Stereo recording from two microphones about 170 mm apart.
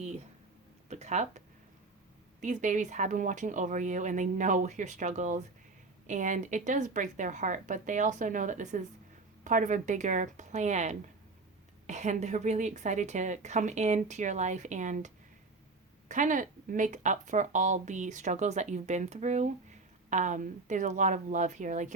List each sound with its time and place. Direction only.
0.9 s speech: 40° right (ahead or behind)
2.4 s speech: 45° right (ahead or behind)